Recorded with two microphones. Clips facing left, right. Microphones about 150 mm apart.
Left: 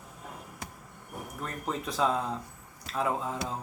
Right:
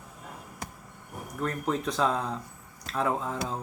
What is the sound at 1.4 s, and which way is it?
Speech, 5° left (ahead or behind).